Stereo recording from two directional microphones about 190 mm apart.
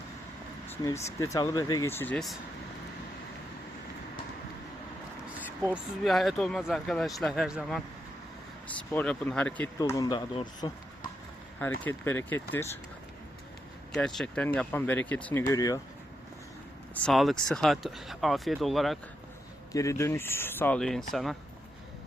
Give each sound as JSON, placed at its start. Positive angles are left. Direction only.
{"t": 0.7, "sound": "speech", "side_deg": 15}
{"t": 6.0, "sound": "speech", "side_deg": 0}
{"t": 8.9, "sound": "speech", "side_deg": 10}
{"t": 11.8, "sound": "speech", "side_deg": 10}
{"t": 13.9, "sound": "speech", "side_deg": 5}
{"t": 16.9, "sound": "speech", "side_deg": 5}
{"t": 19.7, "sound": "speech", "side_deg": 15}